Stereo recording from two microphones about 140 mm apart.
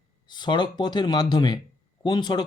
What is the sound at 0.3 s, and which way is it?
Speech, 35° left (ahead or behind).